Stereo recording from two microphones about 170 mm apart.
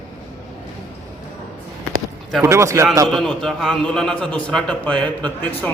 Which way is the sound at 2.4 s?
15° right (ahead or behind).